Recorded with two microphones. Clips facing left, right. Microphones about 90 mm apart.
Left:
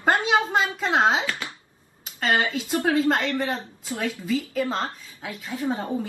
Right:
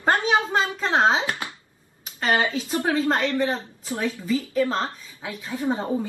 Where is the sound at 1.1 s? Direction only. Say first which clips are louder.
Right 1 dB; 30° right (ahead or behind).